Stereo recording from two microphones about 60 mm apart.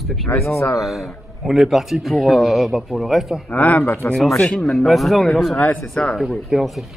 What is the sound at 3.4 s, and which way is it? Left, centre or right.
Speech, left.